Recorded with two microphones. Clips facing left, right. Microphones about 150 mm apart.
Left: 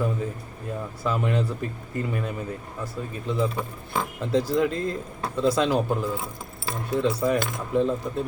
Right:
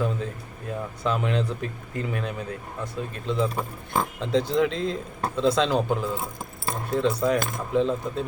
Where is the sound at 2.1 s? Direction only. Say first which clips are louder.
Right 1 dB; 65° right (ahead or behind).